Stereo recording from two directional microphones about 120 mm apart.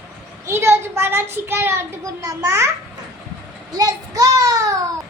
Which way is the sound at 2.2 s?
25° right (ahead or behind).